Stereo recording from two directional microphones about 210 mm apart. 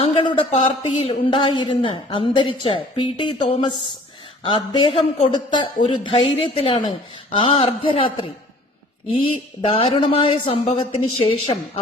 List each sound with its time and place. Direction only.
0.0 s speech: 25° left (ahead or behind)